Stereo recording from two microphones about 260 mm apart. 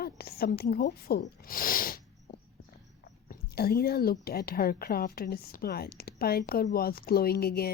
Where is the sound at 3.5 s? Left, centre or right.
Left.